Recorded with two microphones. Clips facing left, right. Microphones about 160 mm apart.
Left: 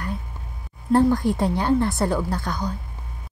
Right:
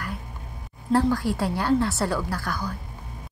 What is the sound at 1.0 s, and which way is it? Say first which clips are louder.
A woman's voice: left 4 dB; 15° left (ahead or behind).